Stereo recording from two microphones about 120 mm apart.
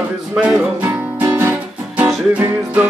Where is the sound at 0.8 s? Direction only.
15° right (ahead or behind).